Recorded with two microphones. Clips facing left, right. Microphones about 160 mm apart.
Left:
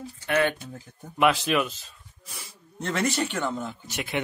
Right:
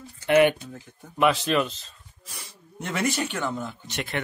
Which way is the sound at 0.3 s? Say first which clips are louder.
Right 6 dB; 20° right (ahead or behind).